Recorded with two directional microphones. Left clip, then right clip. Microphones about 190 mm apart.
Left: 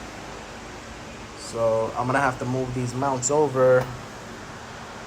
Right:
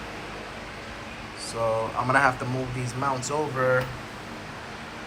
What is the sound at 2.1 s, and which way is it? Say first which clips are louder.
Speech: right 4 dB; 15° left (ahead or behind).